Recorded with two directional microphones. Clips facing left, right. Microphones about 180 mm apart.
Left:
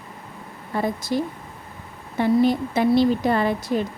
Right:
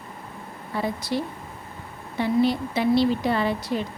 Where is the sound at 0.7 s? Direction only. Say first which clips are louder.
Left 3 dB; 45° left (ahead or behind).